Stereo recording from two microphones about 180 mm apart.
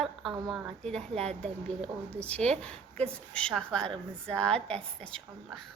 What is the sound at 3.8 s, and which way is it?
Speech, 25° right (ahead or behind).